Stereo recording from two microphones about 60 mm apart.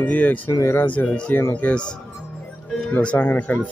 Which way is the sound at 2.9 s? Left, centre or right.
Left.